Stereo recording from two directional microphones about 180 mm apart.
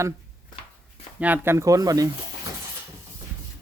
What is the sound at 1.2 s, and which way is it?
Speech, 10° right (ahead or behind).